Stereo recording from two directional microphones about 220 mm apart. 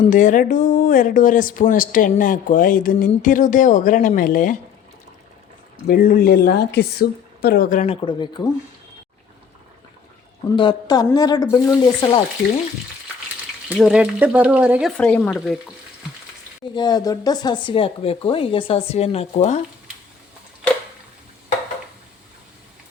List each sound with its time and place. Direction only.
0.1 s speech: 35° left (ahead or behind)
5.9 s speech: 40° left (ahead or behind); by 8.4 s 20° left (ahead or behind)
10.5 s a woman's voice: 20° left (ahead or behind)
13.7 s speech: 5° right (ahead or behind)
16.7 s speech: 20° left (ahead or behind)